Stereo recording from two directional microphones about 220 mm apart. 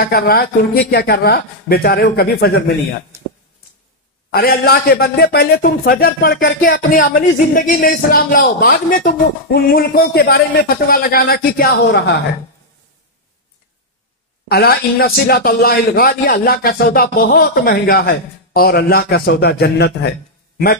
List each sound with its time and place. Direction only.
0.0 s a man's voice: 45° left (ahead or behind)
4.3 s a man's voice: 45° left (ahead or behind)
14.5 s a man's voice: 45° left (ahead or behind)